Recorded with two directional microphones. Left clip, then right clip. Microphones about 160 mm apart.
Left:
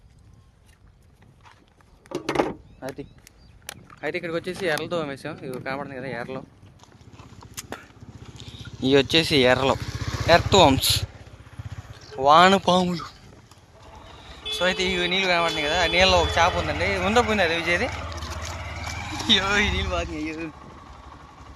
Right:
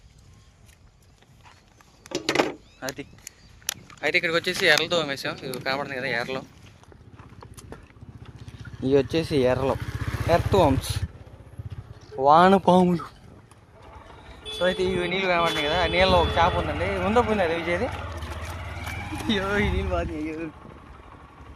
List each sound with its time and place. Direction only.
2.1 s a sound: 65° left (ahead or behind)
4.0 s speech: 10° right (ahead or behind)
7.5 s a sound: 5° left (ahead or behind)
8.8 s speech: 5° right (ahead or behind)
9.7 s vehicle: 40° right (ahead or behind)
10.5 s speech: centre (ahead or behind)
12.1 s speech: 35° right (ahead or behind); by 13.1 s 75° right (ahead or behind)
14.6 s speech: 5° right (ahead or behind)
18.1 s boat: 30° right (ahead or behind)
18.4 s vehicle: 55° right (ahead or behind)
18.9 s speech: 40° right (ahead or behind)